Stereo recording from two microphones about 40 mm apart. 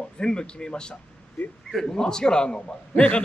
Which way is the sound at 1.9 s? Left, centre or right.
Centre.